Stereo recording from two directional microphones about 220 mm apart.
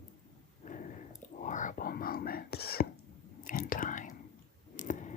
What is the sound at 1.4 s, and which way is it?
Whispering, 35° left (ahead or behind).